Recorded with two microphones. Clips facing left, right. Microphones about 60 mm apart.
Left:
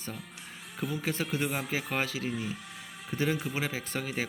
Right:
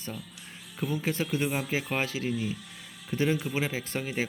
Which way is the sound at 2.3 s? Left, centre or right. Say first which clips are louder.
Right 3 dB; left.